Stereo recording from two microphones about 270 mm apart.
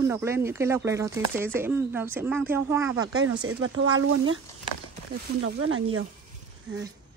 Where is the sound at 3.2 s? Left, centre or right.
Right.